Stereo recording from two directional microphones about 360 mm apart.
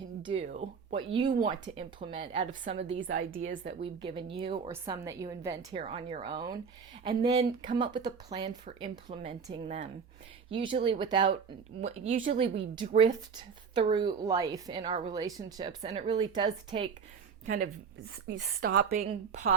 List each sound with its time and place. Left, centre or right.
0.2 s a woman's voice: centre
2.9 s a woman's voice: right
3.5 s a woman's voice: centre
17.4 s a woman's voice: right